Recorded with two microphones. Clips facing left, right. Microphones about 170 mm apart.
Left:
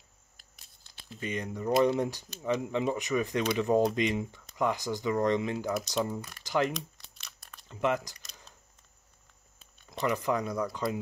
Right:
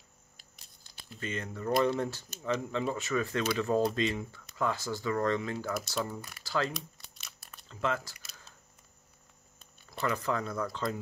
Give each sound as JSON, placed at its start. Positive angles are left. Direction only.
{"t": 0.4, "sound": "a sound", "side_deg": 0}
{"t": 1.2, "sound": "speech", "side_deg": 15}
{"t": 6.7, "sound": "crumpling", "side_deg": -5}
{"t": 7.6, "sound": "speech", "side_deg": 15}
{"t": 10.0, "sound": "speech", "side_deg": 15}